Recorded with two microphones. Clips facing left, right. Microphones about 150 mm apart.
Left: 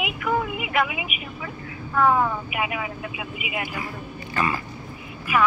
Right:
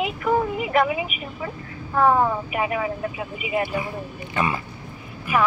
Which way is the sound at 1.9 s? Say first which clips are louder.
Right 2 dB; 25° right (ahead or behind).